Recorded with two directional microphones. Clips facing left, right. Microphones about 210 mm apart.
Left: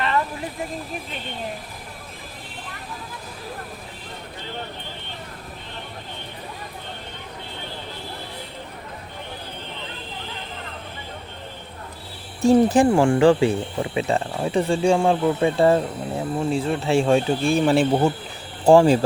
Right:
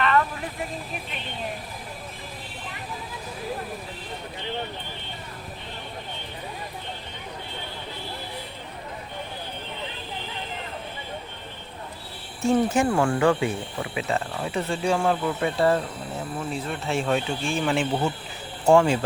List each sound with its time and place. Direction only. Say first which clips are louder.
12.4 s speech: left 6 dB; 35° left (ahead or behind)